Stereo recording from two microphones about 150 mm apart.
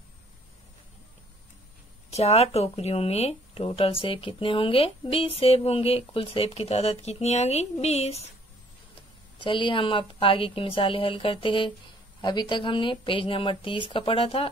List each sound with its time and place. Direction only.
2.0 s speech: 45° left (ahead or behind)
9.4 s speech: 35° left (ahead or behind)